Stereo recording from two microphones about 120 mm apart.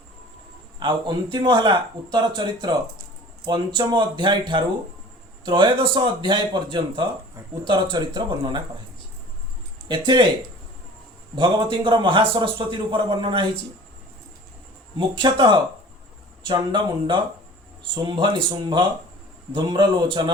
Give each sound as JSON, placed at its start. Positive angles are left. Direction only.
{"t": 0.8, "sound": "a man's voice", "side_deg": -40}
{"t": 11.3, "sound": "a man's voice", "side_deg": -40}
{"t": 14.9, "sound": "speech", "side_deg": -40}